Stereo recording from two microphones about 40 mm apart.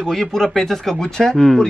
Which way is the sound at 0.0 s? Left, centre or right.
Centre.